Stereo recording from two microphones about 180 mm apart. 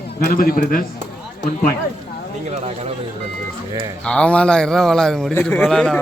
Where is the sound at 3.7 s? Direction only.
25° right (ahead or behind).